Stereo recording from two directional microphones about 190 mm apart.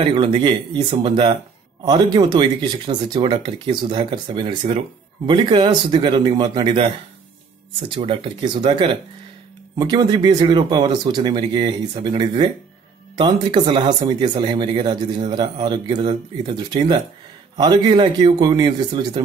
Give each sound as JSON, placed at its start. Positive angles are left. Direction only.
{"t": 0.0, "sound": "speech", "side_deg": -25}
{"t": 7.9, "sound": "speech", "side_deg": -30}